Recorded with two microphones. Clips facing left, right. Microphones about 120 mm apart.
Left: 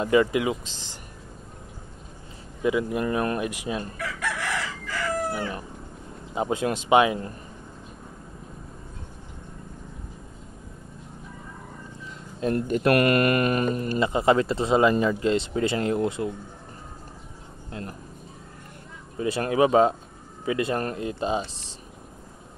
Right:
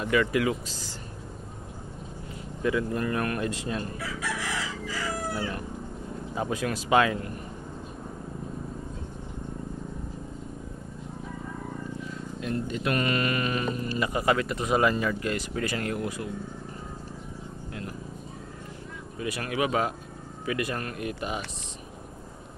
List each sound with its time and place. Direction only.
0.0 s speech: 25° left (ahead or behind)
2.6 s speech: 15° left (ahead or behind)
4.0 s chicken: 60° left (ahead or behind)
6.3 s speech: 25° left (ahead or behind)
12.5 s speech: 50° left (ahead or behind)
13.9 s speech: 25° left (ahead or behind)
19.1 s speech: 30° left (ahead or behind)